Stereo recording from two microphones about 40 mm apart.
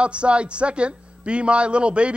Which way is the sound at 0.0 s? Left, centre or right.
Right.